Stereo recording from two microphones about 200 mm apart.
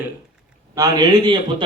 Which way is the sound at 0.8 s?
20° right (ahead or behind).